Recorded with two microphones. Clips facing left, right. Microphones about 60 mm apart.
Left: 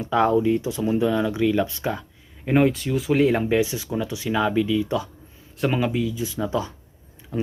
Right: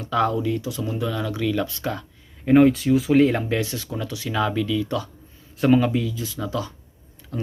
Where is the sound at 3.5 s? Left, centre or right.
Centre.